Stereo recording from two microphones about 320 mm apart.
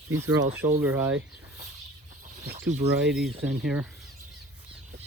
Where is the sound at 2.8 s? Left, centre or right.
Centre.